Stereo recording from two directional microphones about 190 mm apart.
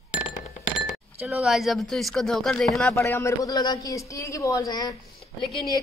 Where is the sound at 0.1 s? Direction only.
40° left (ahead or behind).